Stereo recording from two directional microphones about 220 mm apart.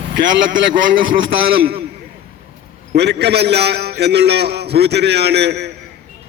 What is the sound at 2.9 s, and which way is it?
A man's voice, 50° right (ahead or behind).